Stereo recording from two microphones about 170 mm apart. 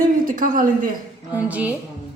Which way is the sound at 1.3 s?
10° right (ahead or behind).